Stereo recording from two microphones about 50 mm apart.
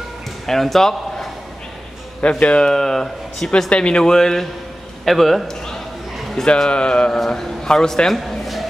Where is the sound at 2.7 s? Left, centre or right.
Centre.